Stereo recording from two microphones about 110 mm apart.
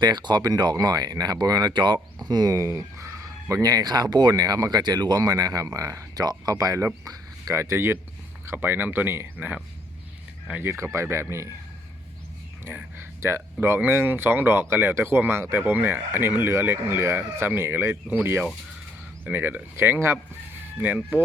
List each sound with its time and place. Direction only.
0.0 s speech: 40° right (ahead or behind); by 11.4 s 25° right (ahead or behind)
12.6 s speech: 20° right (ahead or behind)